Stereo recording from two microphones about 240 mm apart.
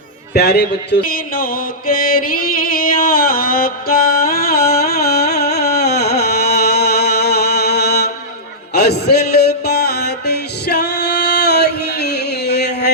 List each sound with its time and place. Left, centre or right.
0.3 s mantra: left
5.5 s music: left